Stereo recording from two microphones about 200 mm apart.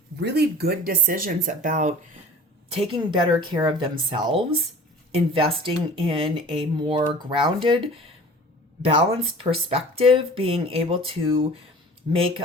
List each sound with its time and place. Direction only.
0.2 s speech: 55° right (ahead or behind); by 2.0 s 40° right (ahead or behind)
2.6 s speech: 30° right (ahead or behind)
9.2 s speech: 30° right (ahead or behind)